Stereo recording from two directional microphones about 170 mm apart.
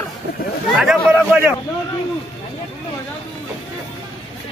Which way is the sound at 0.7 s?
5° right (ahead or behind).